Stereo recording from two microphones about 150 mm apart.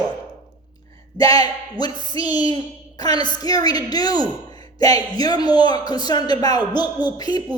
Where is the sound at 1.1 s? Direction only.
25° left (ahead or behind).